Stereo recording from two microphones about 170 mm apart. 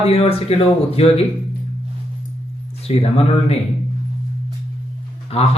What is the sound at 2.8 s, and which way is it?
Speech, 35° left (ahead or behind).